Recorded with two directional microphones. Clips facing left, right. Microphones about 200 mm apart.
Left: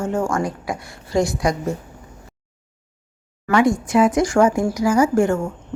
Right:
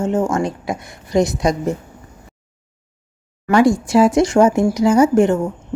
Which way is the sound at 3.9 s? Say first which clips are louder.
Right 3 dB; 30° right (ahead or behind).